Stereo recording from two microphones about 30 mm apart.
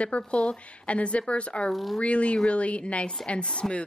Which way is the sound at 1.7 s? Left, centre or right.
Centre.